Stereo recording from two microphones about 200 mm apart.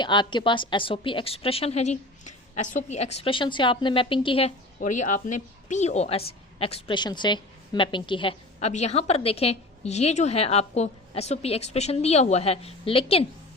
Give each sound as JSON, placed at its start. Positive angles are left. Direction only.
{"t": 0.0, "sound": "a woman's voice", "side_deg": 25}